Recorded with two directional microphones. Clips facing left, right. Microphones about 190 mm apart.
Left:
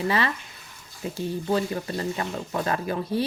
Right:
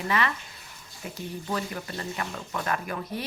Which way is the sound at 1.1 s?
30° left (ahead or behind).